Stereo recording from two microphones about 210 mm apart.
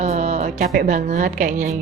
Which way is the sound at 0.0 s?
30° right (ahead or behind).